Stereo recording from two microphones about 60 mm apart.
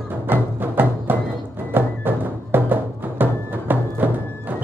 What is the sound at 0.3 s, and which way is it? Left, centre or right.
Music, right.